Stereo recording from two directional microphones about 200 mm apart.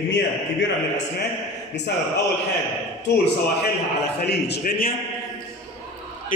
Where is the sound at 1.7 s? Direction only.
60° left (ahead or behind).